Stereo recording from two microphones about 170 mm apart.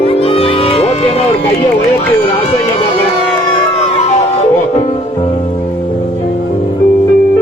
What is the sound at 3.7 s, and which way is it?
Music, 40° left (ahead or behind).